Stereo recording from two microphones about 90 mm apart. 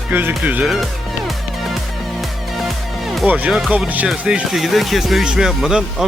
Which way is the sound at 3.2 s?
20° right (ahead or behind).